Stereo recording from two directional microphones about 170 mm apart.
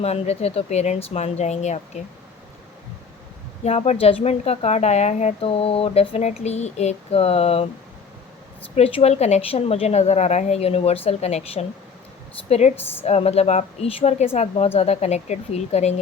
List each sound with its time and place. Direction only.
0.0 s a woman's voice: 40° left (ahead or behind)
3.6 s a woman's voice: 40° left (ahead or behind)
8.7 s a woman's voice: 40° left (ahead or behind)
12.7 s a woman's voice: 15° left (ahead or behind)
13.1 s a woman's voice: 40° left (ahead or behind)